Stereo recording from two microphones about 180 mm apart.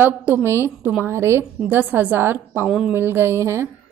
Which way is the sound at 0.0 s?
10° right (ahead or behind).